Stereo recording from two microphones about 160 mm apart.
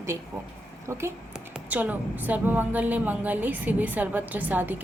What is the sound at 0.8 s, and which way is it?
Speech, 15° right (ahead or behind).